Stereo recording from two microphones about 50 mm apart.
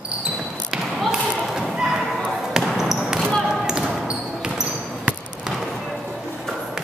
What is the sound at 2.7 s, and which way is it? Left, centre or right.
Basketball bounce, centre.